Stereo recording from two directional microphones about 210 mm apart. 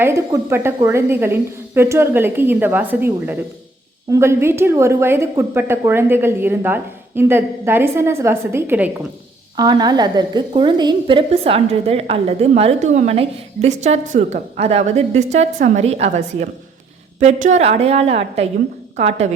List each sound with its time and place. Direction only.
0.0 s a woman's voice: 10° right (ahead or behind); by 19.3 s 30° right (ahead or behind)